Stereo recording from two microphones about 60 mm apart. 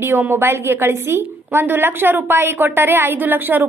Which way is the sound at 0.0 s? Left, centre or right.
Right.